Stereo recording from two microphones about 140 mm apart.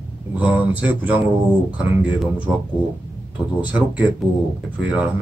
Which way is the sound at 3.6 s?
10° right (ahead or behind).